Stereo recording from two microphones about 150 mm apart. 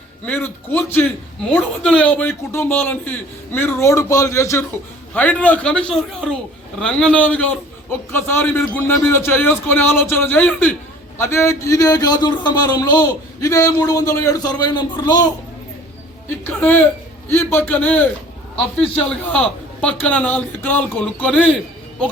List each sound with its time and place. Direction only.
0.3 s a man's voice: 10° left (ahead or behind); by 15.3 s 25° left (ahead or behind)
16.4 s a man's voice: 10° left (ahead or behind)